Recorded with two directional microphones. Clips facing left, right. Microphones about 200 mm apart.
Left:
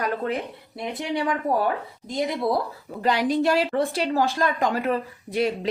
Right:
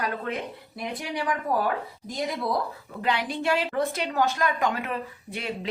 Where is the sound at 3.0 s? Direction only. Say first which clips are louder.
Left 6 dB; 40° left (ahead or behind).